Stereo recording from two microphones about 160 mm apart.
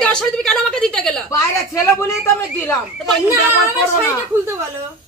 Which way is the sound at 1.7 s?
15° left (ahead or behind).